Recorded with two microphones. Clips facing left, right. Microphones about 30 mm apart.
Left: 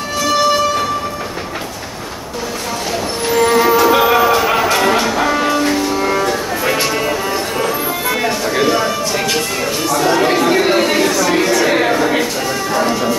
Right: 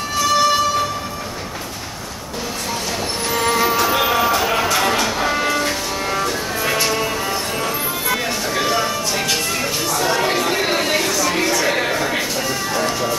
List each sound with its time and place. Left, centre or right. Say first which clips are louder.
0.2 s music: left 2 dB; centre
3.3 s music: left 6 dB; centre
9.8 s chatter: left 6 dB; centre
12.7 s music: left 6 dB; centre